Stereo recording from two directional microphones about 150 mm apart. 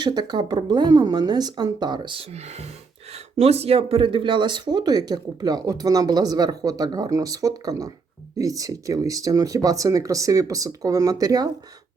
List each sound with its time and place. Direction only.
0.0 s speech: 30° right (ahead or behind)